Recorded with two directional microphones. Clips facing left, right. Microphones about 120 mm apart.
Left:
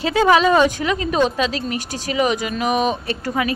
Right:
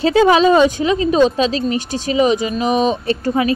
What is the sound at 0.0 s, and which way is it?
Speech, 30° right (ahead or behind).